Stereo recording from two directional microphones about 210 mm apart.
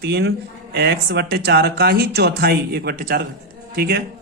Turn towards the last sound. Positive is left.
turn(degrees=-45)  # may be behind; listen again after turning